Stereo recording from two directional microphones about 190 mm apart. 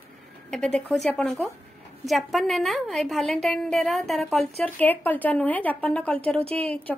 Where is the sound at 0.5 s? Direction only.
5° left (ahead or behind).